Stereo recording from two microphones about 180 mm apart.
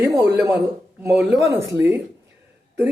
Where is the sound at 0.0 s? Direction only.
15° right (ahead or behind).